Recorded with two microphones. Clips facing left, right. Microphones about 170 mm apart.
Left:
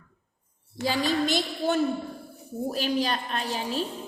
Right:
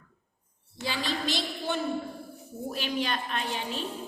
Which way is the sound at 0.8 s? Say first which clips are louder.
Left 7 dB; 45° left (ahead or behind).